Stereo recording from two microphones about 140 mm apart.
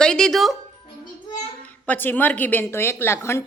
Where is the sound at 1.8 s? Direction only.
15° left (ahead or behind).